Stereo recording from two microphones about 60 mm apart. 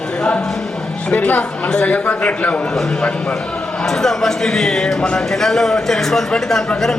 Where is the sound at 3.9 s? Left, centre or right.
Centre.